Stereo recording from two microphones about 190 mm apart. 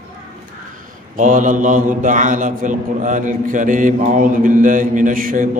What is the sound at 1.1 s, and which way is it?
A man's voice, 40° right (ahead or behind).